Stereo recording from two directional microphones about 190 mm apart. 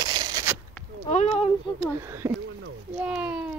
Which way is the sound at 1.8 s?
15° right (ahead or behind).